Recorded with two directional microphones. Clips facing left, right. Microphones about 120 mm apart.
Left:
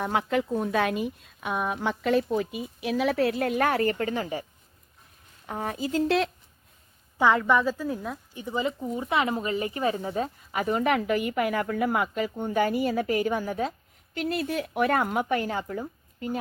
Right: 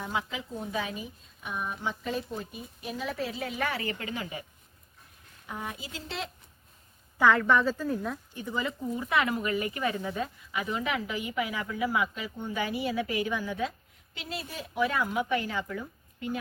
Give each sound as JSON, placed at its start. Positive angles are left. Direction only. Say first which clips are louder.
{"t": 0.0, "sound": "a woman's voice", "louder": "left 8 dB", "side_deg": 60}
{"t": 5.5, "sound": "a woman's voice", "louder": "left 9 dB", "side_deg": 40}
{"t": 6.1, "sound": "a woman's voice", "louder": "left 10 dB", "side_deg": 75}
{"t": 7.2, "sound": "a woman's voice", "louder": "left 1 dB", "side_deg": 20}
{"t": 8.4, "sound": "a woman's voice", "louder": "left 4 dB", "side_deg": 25}